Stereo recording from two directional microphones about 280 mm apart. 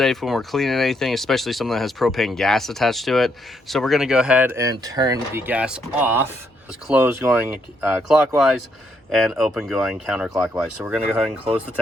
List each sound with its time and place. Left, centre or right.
0.0 s speech: centre